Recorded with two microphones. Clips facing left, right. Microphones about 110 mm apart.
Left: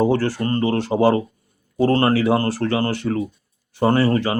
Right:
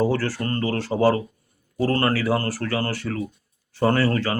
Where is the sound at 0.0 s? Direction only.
20° left (ahead or behind).